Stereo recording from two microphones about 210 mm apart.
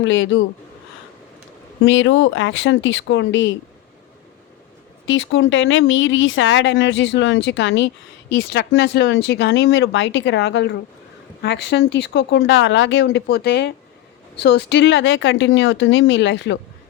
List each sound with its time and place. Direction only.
0.0 s a man's voice: 65° left (ahead or behind)
1.8 s speech: 65° left (ahead or behind)
5.0 s speech: 65° left (ahead or behind)